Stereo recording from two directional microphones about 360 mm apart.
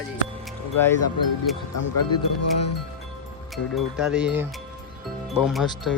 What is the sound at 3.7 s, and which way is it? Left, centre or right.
Speech, centre.